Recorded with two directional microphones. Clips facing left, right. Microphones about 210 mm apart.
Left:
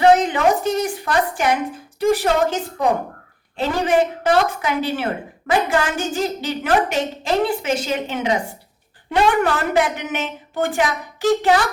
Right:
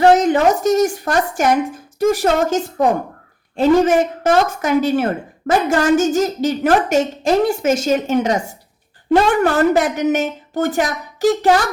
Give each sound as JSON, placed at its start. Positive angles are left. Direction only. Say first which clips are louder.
{"t": 0.0, "sound": "a woman's voice", "louder": "right 3 dB", "side_deg": -45}